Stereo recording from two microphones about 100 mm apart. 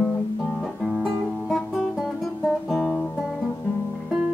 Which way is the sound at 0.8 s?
Centre (ahead or behind).